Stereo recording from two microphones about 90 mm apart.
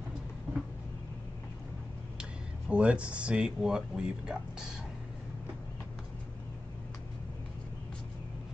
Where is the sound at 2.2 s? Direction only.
10° right (ahead or behind).